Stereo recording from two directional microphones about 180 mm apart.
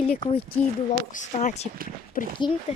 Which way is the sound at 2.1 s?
50° left (ahead or behind).